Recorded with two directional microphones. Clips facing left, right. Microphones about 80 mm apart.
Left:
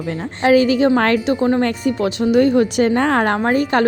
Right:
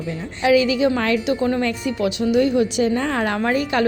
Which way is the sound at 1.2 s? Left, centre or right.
Left.